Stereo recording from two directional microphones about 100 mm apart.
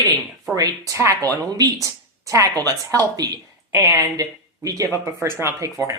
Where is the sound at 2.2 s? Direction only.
35° right (ahead or behind).